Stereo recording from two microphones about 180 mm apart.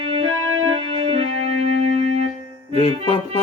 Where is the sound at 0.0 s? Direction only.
30° right (ahead or behind).